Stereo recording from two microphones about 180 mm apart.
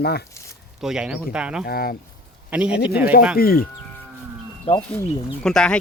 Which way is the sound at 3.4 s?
55° left (ahead or behind).